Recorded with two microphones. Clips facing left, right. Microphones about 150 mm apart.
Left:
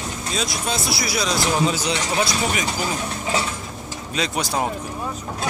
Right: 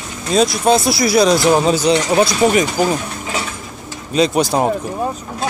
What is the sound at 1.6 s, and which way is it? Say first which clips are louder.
Speech: right 9 dB; 40° right (ahead or behind).